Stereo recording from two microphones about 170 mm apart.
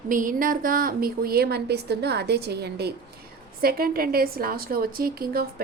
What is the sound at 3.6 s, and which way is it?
A woman's voice, 60° right (ahead or behind).